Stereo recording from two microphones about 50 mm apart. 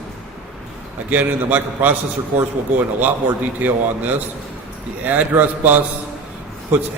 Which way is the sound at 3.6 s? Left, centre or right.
Right.